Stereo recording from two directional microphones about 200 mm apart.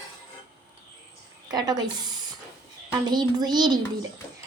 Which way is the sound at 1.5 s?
20° right (ahead or behind).